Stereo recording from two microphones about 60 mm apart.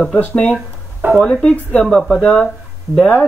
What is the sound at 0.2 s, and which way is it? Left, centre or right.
Speech, left.